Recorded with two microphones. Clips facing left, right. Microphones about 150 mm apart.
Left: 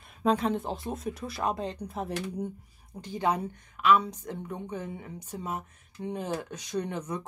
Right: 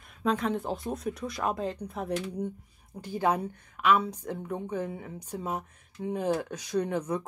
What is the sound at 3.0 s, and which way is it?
Speech, 10° right (ahead or behind).